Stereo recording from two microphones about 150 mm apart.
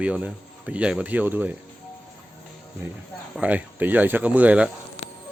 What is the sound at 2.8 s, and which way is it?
Speech, 15° right (ahead or behind).